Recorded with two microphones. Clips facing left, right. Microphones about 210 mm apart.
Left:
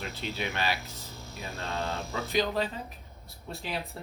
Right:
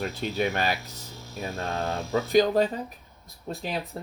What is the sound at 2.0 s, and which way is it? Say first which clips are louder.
Speech: right 8 dB; centre (ahead or behind).